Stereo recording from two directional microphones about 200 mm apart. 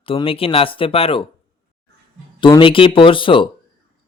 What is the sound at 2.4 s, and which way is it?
Speech, 25° left (ahead or behind).